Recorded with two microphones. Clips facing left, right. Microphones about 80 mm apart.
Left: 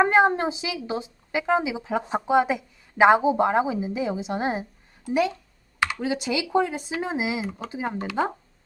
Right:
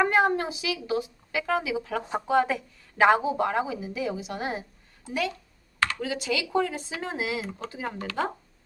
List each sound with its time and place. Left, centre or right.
0.0 s a woman's voice: left